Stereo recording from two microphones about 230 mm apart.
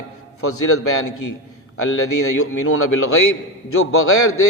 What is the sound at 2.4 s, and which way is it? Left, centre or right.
A man's voice, left.